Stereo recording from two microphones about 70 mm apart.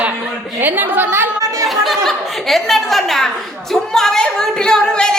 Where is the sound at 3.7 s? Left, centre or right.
Centre.